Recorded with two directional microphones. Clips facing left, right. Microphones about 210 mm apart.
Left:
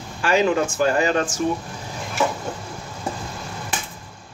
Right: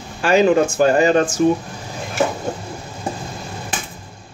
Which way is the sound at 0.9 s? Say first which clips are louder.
Right 6 dB; 30° right (ahead or behind).